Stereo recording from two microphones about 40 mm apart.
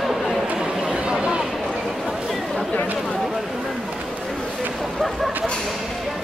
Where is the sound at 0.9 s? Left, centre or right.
Right.